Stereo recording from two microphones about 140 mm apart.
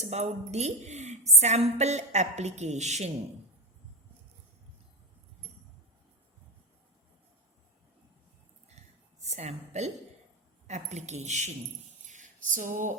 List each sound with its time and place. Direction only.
0.0 s a woman's voice: 50° right (ahead or behind)
9.2 s a woman's voice: 55° right (ahead or behind)